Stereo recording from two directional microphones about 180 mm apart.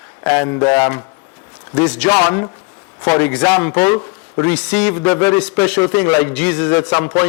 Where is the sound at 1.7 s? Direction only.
5° left (ahead or behind).